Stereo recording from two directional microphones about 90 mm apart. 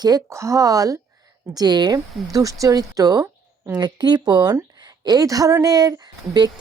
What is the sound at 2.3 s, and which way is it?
Speech, 40° right (ahead or behind).